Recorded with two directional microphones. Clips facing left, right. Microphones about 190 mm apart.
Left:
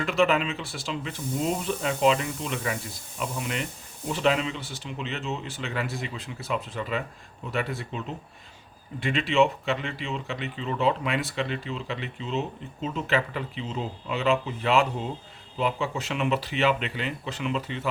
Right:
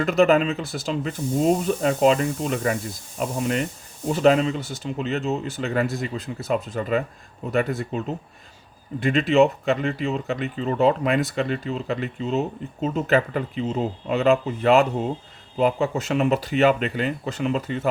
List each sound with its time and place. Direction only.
0.0 s speech: 40° right (ahead or behind)